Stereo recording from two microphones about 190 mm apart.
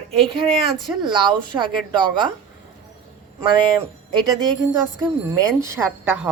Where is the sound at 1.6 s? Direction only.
25° right (ahead or behind).